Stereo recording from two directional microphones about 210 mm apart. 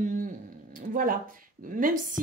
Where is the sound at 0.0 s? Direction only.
35° right (ahead or behind).